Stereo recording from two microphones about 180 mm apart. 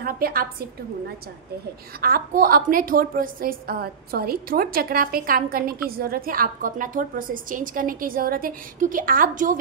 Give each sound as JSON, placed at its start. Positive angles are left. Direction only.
{"t": 0.0, "sound": "a woman's voice", "side_deg": -55}